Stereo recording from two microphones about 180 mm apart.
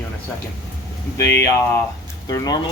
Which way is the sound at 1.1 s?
15° left (ahead or behind).